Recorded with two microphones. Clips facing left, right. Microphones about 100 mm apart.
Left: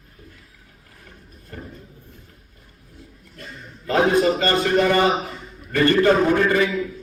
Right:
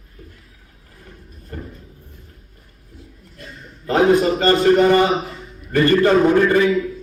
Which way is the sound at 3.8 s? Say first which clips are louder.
Right 3 dB; 35° right (ahead or behind).